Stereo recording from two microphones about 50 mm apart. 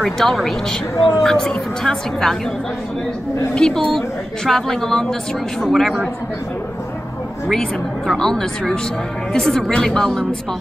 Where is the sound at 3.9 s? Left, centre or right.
Centre.